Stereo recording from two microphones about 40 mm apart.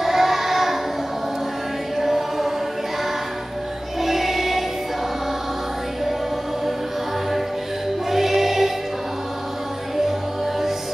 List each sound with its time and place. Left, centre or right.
0.0 s child singing: centre
2.0 s chant: centre
4.0 s music: centre
8.1 s music: centre